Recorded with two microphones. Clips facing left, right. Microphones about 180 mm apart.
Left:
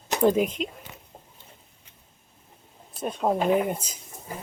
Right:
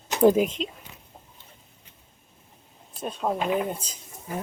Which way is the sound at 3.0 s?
15° left (ahead or behind).